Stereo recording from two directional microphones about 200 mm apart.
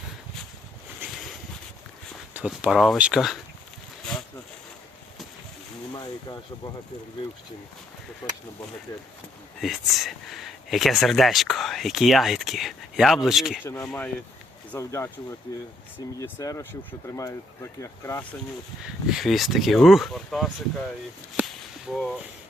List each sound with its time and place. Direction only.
2.3 s speech: 5° right (ahead or behind)
5.9 s speech: 20° left (ahead or behind)
9.6 s speech: centre (ahead or behind)
16.2 s speech: 15° left (ahead or behind)
19.0 s speech: centre (ahead or behind)
21.4 s whip: 10° right (ahead or behind)
21.9 s speech: 5° left (ahead or behind)